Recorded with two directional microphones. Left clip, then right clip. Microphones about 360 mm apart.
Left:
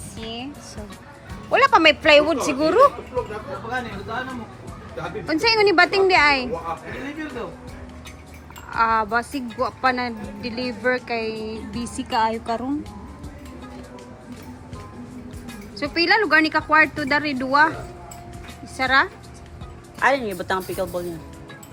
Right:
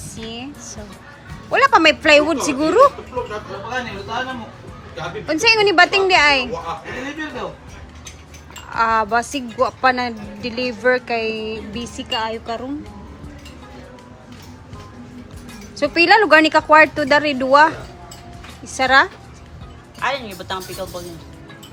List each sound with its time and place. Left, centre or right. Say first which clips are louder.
0.2 s music: right 1 dB; centre
1.5 s a woman's voice: right 2 dB; centre
5.2 s speech: right 3 dB; centre
8.7 s speech: right 3 dB; centre
15.8 s a woman's voice: right 6 dB; centre
18.8 s speech: right 5 dB; centre
20.0 s speech: left 3 dB; left